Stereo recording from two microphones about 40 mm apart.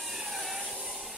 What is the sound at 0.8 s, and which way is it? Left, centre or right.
Train, centre.